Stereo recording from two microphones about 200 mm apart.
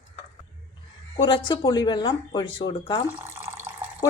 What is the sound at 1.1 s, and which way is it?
Speech, 25° left (ahead or behind).